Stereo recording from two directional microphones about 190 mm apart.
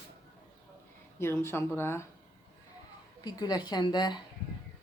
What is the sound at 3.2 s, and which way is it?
Speech, 20° left (ahead or behind).